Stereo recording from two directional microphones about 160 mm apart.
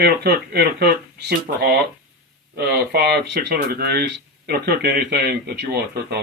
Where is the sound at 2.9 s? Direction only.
85° right.